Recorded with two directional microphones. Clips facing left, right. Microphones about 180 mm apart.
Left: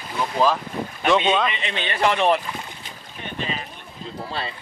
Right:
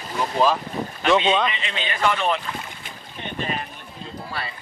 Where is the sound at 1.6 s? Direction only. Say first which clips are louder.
Left 2 dB; 30° left (ahead or behind).